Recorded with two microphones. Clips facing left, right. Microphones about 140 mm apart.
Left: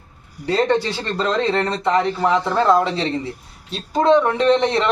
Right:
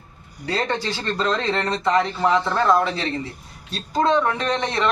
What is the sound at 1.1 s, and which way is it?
A man's voice, 15° left (ahead or behind).